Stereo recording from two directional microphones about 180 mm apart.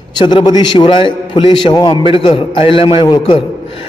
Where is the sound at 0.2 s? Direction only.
25° left (ahead or behind).